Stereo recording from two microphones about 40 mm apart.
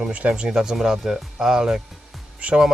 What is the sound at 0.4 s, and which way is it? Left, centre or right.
Speech, centre.